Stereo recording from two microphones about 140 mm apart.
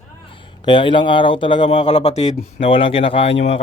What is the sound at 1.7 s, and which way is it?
Speech, 55° left (ahead or behind).